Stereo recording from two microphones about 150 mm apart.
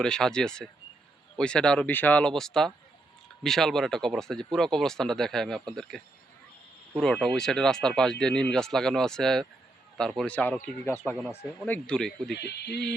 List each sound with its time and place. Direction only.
0.0 s speech: 5° left (ahead or behind)
12.3 s speech: 90° left